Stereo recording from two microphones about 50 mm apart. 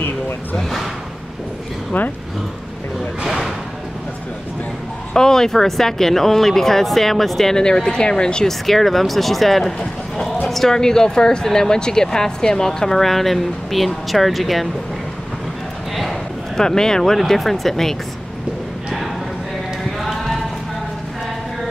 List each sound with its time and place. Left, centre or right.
0.6 s speech: centre
1.9 s speech: left
3.3 s a sound: centre
5.1 s speech: centre
8.5 s speech: centre
16.0 s speech: centre